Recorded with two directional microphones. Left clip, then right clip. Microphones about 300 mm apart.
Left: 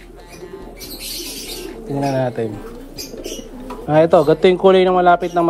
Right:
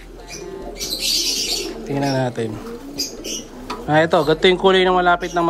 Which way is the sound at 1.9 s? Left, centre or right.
Centre.